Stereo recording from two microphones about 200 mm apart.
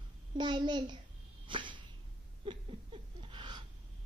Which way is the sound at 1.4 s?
25° right (ahead or behind).